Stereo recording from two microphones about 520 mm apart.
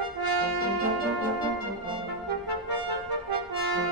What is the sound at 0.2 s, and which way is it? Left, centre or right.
Brass instrument, right.